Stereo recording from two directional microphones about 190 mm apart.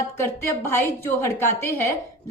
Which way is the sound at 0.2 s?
15° left (ahead or behind).